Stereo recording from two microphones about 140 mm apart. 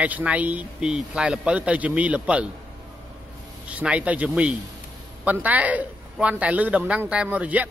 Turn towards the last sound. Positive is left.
turn(degrees=-10)  # may be behind; listen again after turning